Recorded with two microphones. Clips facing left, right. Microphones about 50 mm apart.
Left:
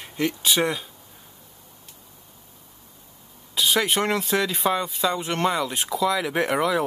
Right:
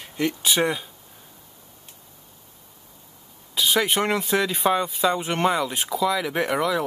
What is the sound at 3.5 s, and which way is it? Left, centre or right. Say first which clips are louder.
Speech: even; centre.